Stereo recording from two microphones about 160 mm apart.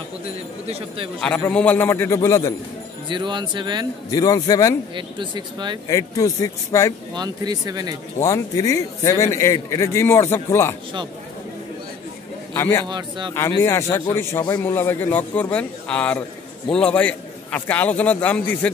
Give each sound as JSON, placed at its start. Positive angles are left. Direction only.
{"t": 0.7, "sound": "a man's voice", "side_deg": -35}
{"t": 1.2, "sound": "a man's voice", "side_deg": 5}
{"t": 3.1, "sound": "speech", "side_deg": -30}
{"t": 4.1, "sound": "a man's voice", "side_deg": 25}
{"t": 4.9, "sound": "speech", "side_deg": -30}
{"t": 5.9, "sound": "a man's voice", "side_deg": 20}
{"t": 7.2, "sound": "speech", "side_deg": -25}
{"t": 8.2, "sound": "a man's voice", "side_deg": 20}
{"t": 12.5, "sound": "a man's voice", "side_deg": 15}
{"t": 12.8, "sound": "speech", "side_deg": -25}
{"t": 13.3, "sound": "a man's voice", "side_deg": 15}